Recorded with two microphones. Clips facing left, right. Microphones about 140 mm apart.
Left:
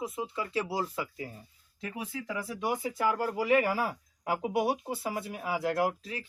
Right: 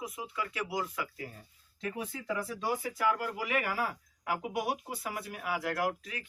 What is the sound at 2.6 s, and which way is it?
Speech, 20° left (ahead or behind).